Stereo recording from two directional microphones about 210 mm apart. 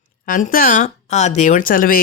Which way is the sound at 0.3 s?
40° left (ahead or behind).